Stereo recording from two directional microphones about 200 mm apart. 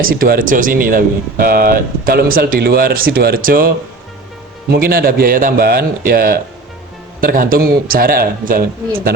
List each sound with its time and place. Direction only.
0.0 s speech: 45° right (ahead or behind)
4.7 s speech: 50° right (ahead or behind)